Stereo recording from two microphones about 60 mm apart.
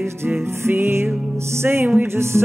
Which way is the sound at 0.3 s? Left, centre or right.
Right.